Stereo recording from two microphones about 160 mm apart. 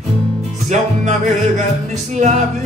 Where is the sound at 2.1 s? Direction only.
45° right (ahead or behind).